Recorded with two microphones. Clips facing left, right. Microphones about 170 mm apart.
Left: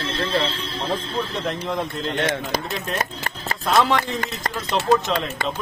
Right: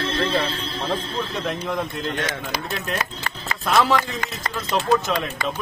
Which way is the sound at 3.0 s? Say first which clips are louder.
Left 2 dB; 45° left (ahead or behind).